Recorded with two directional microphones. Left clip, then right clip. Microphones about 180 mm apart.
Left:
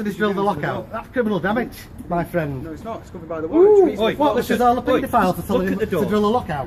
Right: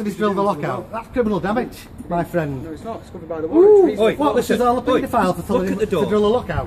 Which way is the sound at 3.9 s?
65° right (ahead or behind).